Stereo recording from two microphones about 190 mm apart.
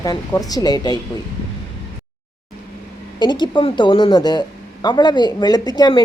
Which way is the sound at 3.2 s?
25° left (ahead or behind).